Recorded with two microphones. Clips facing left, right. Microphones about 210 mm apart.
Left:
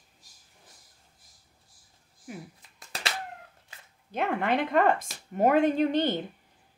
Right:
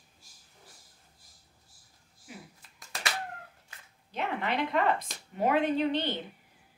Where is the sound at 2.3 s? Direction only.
50° left (ahead or behind).